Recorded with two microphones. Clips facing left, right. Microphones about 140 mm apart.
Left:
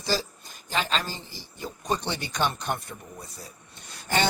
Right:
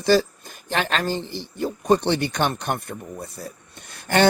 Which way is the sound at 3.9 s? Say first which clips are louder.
Right 7 dB; 60° right (ahead or behind).